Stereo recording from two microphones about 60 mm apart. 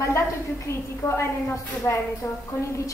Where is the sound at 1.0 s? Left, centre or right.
Left.